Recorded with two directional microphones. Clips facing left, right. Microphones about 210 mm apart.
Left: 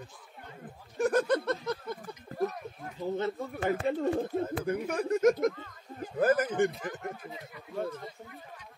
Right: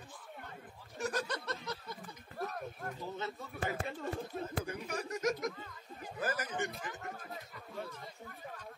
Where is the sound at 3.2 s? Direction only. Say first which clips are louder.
Left 8 dB; 55° left (ahead or behind).